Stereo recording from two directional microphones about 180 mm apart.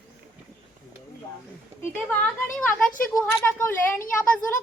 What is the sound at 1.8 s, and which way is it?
Speech, 10° left (ahead or behind).